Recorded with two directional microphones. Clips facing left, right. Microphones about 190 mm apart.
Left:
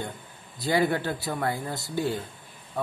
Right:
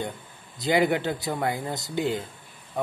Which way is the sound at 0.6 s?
20° right (ahead or behind).